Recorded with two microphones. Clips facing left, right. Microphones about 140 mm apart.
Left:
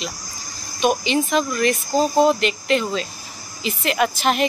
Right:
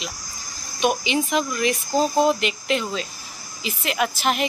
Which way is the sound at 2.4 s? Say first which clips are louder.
Left 4 dB; 5° right (ahead or behind).